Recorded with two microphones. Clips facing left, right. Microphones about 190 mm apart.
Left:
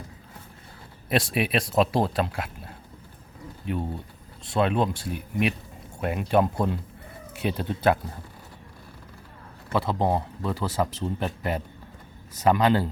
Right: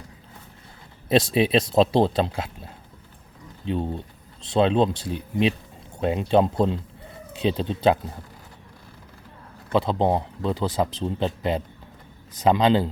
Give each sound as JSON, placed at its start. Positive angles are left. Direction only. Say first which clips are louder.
{"t": 1.0, "sound": "speech", "louder": "right 5 dB", "side_deg": -25}
{"t": 3.7, "sound": "speech", "louder": "right 4 dB", "side_deg": -25}
{"t": 9.7, "sound": "speech", "louder": "right 3 dB", "side_deg": -20}